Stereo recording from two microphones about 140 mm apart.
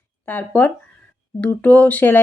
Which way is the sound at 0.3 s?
10° left (ahead or behind).